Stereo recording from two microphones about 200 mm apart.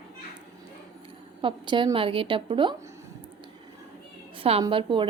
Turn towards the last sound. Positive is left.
turn(degrees=-25)  # may be behind; listen again after turning